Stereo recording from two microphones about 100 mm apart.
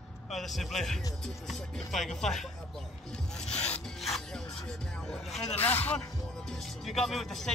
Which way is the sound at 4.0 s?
5° left (ahead or behind).